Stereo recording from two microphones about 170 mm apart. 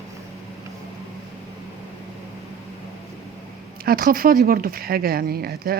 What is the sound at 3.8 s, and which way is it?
Speech, 60° right (ahead or behind).